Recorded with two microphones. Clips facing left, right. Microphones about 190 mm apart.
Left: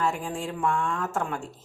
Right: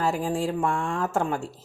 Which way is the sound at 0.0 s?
35° right (ahead or behind).